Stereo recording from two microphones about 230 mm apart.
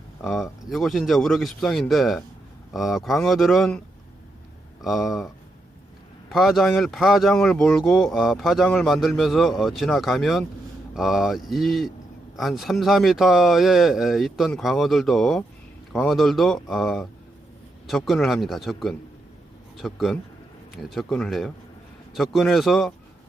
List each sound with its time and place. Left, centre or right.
0.2 s speech: centre